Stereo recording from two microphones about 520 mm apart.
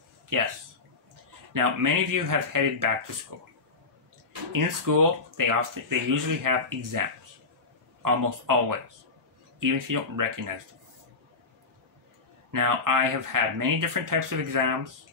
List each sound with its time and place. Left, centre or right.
0.3 s speech: right
1.5 s speech: right
4.5 s speech: right
12.4 s speech: right